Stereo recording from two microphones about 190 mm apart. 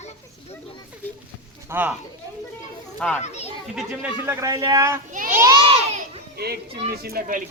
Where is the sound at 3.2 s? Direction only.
35° left (ahead or behind).